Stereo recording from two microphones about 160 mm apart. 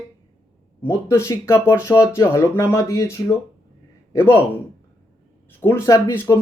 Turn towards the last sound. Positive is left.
turn(degrees=15)  # may be behind; listen again after turning